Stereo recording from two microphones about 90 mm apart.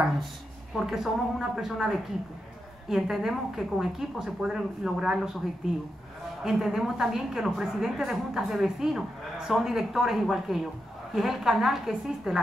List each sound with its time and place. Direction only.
0.7 s a woman's voice: 5° right (ahead or behind)
6.4 s a woman's voice: 5° right (ahead or behind)